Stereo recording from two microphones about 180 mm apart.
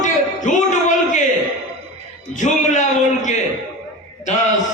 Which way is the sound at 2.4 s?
40° left (ahead or behind).